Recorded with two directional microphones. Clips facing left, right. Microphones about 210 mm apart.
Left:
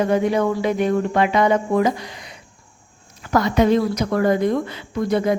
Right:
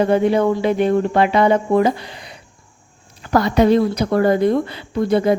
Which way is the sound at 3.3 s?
35° right (ahead or behind).